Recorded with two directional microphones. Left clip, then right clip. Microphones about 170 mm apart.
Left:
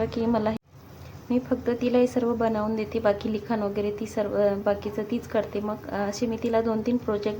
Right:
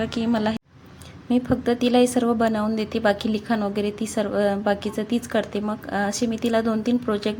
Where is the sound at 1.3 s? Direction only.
25° right (ahead or behind).